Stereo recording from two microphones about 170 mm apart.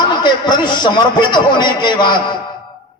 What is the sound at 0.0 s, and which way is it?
A man's voice, 25° left (ahead or behind).